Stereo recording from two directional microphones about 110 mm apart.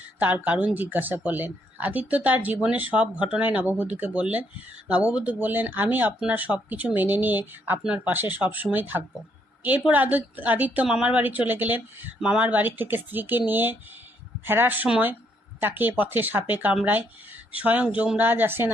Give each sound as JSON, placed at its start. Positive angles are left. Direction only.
{"t": 0.2, "sound": "speech", "side_deg": -15}